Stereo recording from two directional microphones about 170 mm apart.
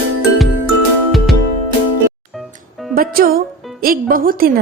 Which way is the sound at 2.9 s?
60° right (ahead or behind).